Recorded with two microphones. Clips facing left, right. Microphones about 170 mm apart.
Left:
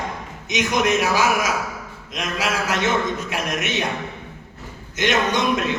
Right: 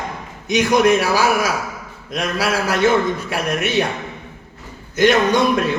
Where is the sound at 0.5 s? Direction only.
35° right (ahead or behind).